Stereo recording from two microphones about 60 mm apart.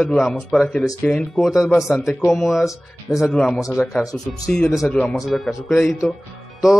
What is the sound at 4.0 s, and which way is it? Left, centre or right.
Speech, left.